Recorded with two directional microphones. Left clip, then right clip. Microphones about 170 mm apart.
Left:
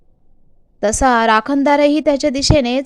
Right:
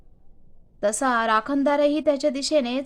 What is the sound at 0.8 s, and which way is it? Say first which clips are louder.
A woman's voice: left 9 dB; 30° left (ahead or behind).